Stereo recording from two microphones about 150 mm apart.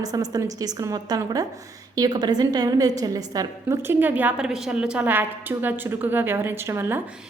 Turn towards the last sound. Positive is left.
turn(degrees=-15)  # may be behind; listen again after turning